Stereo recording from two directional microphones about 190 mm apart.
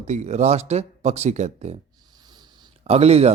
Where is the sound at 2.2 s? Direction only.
20° right (ahead or behind).